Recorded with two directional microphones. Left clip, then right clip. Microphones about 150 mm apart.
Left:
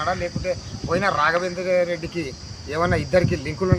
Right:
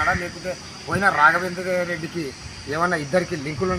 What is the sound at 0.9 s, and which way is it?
Speech, 35° left (ahead or behind).